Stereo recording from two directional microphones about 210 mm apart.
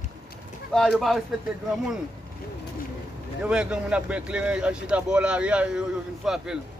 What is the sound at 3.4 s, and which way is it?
Speech, 5° right (ahead or behind).